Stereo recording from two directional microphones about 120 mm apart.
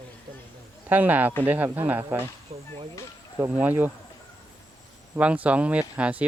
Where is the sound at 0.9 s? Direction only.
15° right (ahead or behind).